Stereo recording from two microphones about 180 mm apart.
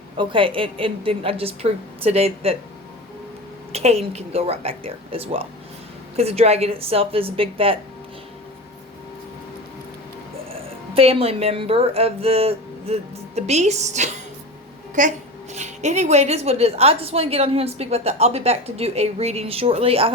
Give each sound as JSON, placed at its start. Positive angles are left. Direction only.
{"t": 0.2, "sound": "a woman's voice", "side_deg": -30}
{"t": 3.7, "sound": "a woman's voice", "side_deg": -35}
{"t": 10.9, "sound": "a woman's voice", "side_deg": -30}